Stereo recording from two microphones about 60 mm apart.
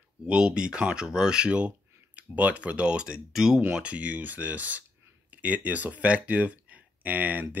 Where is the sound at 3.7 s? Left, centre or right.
Right.